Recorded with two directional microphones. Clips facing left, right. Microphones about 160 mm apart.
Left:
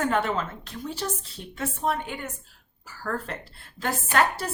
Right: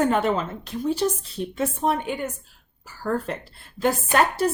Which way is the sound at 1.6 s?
15° right (ahead or behind).